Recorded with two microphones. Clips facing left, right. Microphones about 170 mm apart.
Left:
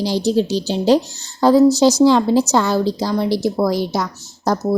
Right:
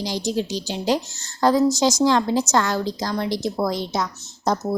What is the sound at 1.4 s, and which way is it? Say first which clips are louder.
Speech: left 6 dB; 10° left (ahead or behind).